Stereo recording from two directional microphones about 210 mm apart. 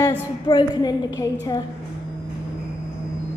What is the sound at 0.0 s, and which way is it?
A woman's voice, 20° left (ahead or behind).